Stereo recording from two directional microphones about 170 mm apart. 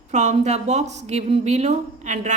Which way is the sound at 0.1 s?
45° right (ahead or behind).